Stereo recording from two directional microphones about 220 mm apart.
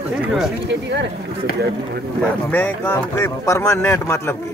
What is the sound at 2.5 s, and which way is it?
Speech, 10° left (ahead or behind).